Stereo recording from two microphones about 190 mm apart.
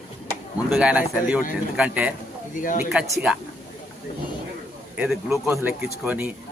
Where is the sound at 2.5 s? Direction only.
45° left (ahead or behind).